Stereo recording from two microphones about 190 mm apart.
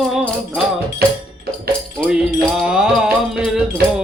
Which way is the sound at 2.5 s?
5° right (ahead or behind).